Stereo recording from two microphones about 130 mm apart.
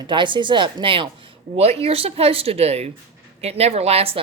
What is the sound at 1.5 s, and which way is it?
Speech, 55° right (ahead or behind).